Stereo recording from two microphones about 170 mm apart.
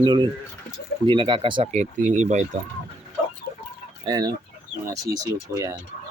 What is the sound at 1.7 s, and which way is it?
Speech, 45° right (ahead or behind).